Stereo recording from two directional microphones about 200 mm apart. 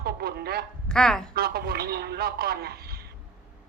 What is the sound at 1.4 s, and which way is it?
Speech, 50° right (ahead or behind).